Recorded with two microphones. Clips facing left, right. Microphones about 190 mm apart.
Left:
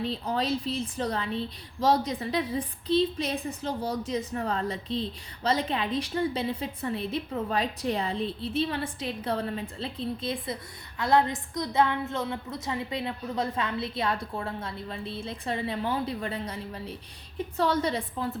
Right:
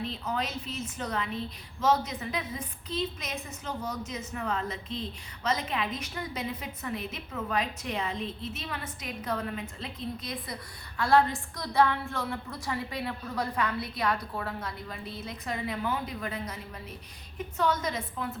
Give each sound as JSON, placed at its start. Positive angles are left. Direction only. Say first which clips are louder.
{"t": 0.0, "sound": "a woman's voice", "louder": "left 4 dB", "side_deg": 35}